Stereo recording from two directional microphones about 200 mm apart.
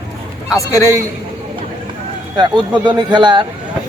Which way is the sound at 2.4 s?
25° right (ahead or behind).